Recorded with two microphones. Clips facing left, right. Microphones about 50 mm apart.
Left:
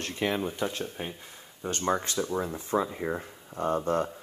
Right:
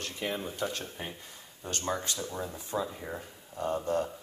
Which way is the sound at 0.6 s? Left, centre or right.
Left.